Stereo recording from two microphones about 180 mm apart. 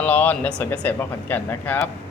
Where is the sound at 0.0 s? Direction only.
10° left (ahead or behind).